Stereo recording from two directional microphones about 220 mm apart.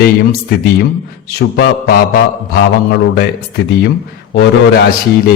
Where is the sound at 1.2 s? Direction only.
45° left (ahead or behind).